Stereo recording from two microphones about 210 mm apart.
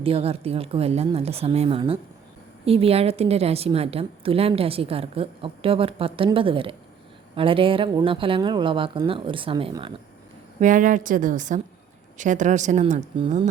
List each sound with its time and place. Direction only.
0.0 s a woman's voice: 25° right (ahead or behind)
10.6 s speech: 40° right (ahead or behind)